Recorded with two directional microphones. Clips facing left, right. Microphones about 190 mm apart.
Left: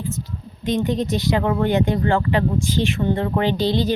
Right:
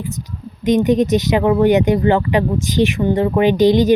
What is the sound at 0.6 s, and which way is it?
Speech, 20° right (ahead or behind).